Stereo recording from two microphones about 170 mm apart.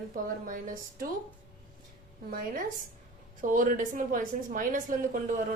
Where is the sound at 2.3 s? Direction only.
55° right (ahead or behind).